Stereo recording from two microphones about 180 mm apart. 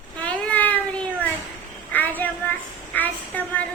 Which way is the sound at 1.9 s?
10° left (ahead or behind).